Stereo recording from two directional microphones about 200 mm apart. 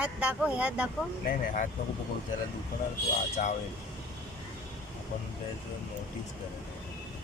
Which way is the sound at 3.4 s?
40° left (ahead or behind).